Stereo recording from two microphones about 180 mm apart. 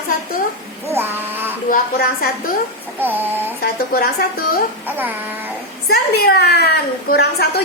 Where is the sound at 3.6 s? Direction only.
55° left (ahead or behind).